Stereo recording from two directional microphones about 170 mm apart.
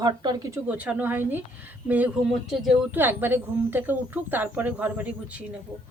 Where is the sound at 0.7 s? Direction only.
10° right (ahead or behind).